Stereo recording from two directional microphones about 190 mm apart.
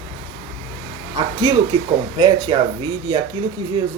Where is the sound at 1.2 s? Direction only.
20° right (ahead or behind).